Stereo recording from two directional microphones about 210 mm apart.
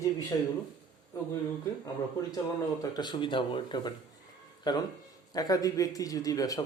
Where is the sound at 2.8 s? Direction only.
20° left (ahead or behind).